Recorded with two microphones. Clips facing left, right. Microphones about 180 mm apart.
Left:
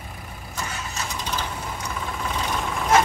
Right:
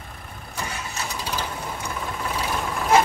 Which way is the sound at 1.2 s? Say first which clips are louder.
Right 1 dB; 10° right (ahead or behind).